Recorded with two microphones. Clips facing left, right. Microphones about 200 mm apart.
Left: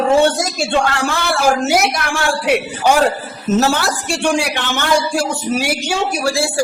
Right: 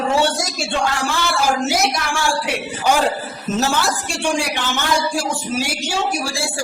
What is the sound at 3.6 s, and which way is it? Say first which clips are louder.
A man's voice: left 1 dB; 65° left (ahead or behind).